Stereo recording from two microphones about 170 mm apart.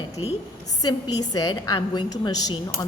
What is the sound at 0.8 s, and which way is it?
A woman's voice, 25° left (ahead or behind).